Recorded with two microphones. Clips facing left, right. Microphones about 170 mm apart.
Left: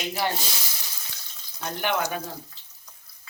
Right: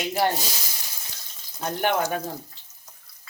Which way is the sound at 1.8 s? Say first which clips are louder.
Right 3 dB; 45° right (ahead or behind).